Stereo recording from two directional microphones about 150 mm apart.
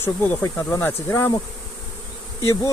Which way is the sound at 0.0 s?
15° left (ahead or behind).